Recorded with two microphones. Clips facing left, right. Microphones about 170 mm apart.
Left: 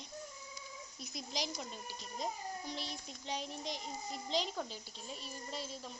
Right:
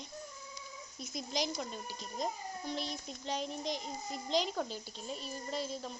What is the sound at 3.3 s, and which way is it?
A child's voice, 45° right (ahead or behind).